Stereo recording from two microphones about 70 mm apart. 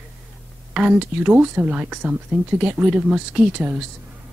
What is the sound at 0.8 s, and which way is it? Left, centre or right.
Speech, centre.